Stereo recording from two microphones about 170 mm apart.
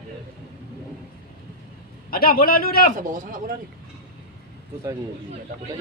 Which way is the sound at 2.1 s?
60° left (ahead or behind).